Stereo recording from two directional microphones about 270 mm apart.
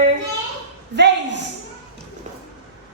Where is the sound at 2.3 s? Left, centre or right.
Right.